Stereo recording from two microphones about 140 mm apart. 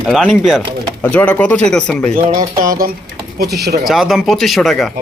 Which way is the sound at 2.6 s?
90° right.